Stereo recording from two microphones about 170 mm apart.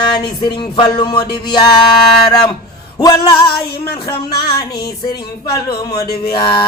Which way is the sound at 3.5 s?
65° left (ahead or behind).